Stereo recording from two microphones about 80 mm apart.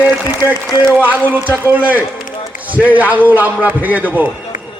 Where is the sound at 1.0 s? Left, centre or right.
Right.